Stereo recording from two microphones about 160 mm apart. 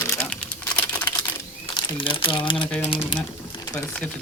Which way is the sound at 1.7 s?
30° left (ahead or behind).